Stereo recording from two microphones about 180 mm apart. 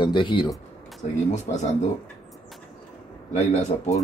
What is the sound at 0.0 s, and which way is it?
Speech, 25° left (ahead or behind).